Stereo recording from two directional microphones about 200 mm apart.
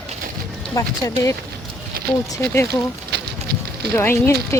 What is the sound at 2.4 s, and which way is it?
Speech, 10° left (ahead or behind).